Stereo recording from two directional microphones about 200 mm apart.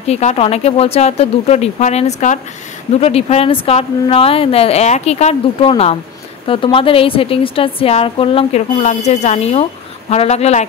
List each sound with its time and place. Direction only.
0.0 s a woman's voice: 35° left (ahead or behind)